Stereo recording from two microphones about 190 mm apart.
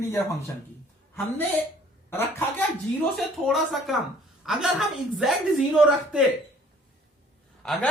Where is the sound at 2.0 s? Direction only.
15° left (ahead or behind).